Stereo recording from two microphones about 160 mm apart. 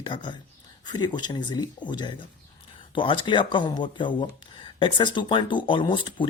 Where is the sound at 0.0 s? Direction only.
30° left (ahead or behind).